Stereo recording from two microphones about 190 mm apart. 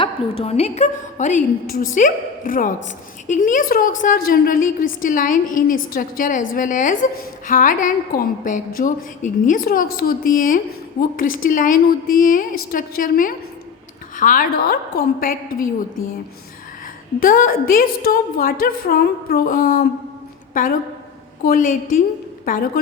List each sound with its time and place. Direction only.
0.0 s a woman's voice: 30° left (ahead or behind); by 15.6 s 50° left (ahead or behind)
17.2 s a woman's voice: 45° left (ahead or behind)